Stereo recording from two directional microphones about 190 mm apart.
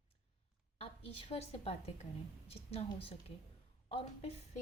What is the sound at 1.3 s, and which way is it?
A woman's voice, 30° left (ahead or behind).